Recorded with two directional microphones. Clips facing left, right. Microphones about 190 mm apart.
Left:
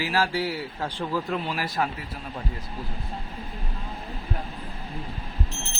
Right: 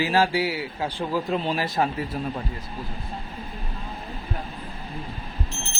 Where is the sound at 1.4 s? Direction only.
25° right (ahead or behind).